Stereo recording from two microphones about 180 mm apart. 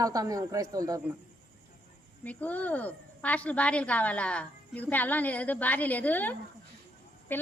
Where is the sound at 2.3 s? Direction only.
10° left (ahead or behind).